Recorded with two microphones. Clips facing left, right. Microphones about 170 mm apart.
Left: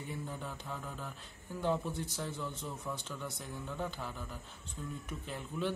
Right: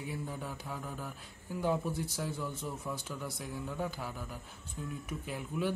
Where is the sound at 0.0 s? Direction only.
5° right (ahead or behind).